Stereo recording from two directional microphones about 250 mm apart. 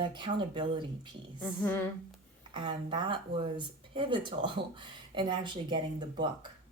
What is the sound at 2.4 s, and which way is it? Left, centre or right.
Speech, centre.